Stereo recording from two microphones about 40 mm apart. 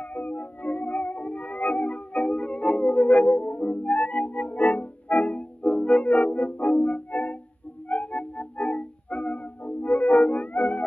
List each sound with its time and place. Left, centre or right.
0.1 s music: left